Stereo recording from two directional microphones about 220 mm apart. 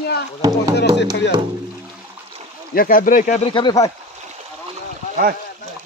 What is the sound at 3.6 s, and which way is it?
Speech, 20° left (ahead or behind).